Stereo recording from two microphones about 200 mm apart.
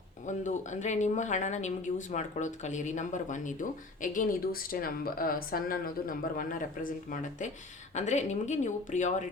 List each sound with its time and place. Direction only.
0.3 s speech: 35° left (ahead or behind)